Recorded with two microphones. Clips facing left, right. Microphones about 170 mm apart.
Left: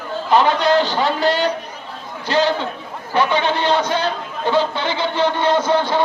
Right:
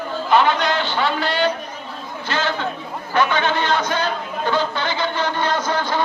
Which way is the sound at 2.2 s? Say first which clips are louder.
Left 6 dB; 35° left (ahead or behind).